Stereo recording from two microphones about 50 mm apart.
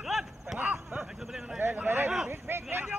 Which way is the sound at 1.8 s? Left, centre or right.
Right.